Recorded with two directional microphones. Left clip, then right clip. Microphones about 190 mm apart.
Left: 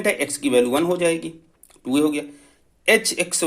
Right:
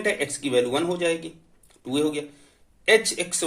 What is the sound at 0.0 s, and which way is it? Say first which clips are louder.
Speech: left 4 dB; 35° left (ahead or behind).